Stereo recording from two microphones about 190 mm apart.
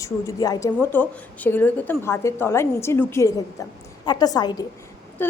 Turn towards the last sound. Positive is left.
turn(degrees=10)  # may be behind; listen again after turning